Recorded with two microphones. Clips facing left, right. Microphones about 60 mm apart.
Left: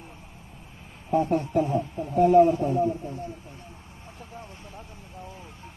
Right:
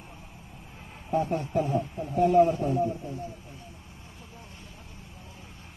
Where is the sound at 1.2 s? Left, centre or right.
Left.